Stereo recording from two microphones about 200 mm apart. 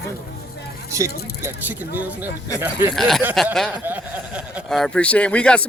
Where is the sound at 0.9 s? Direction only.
15° right (ahead or behind).